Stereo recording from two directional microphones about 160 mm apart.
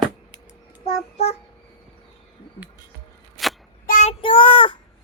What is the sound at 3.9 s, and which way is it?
Child singing, 50° left (ahead or behind).